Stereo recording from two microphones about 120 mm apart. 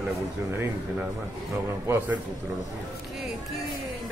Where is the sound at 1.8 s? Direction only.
15° right (ahead or behind).